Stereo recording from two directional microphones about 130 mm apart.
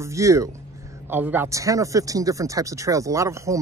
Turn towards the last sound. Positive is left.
turn(degrees=-25)  # may be behind; listen again after turning